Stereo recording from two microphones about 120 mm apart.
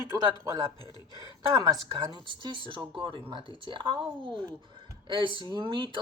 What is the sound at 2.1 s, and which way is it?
Speech, 40° right (ahead or behind).